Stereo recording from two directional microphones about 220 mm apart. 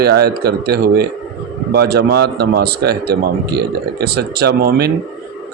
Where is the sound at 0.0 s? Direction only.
45° right (ahead or behind).